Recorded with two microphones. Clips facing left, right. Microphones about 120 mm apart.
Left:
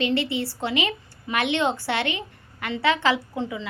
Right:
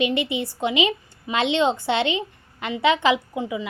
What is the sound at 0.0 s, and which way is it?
A woman's voice, 20° right (ahead or behind).